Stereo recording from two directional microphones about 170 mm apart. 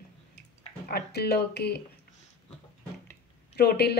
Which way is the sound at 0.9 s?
70° left (ahead or behind).